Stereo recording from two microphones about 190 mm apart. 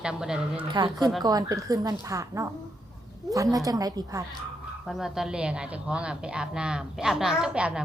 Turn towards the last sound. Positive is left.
turn(degrees=-5)  # may be behind; listen again after turning